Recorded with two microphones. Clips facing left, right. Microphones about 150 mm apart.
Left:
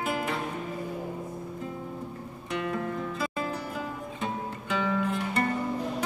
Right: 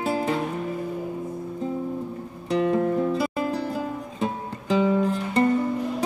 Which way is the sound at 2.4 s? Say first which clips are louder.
Right 10 dB; 30° right (ahead or behind).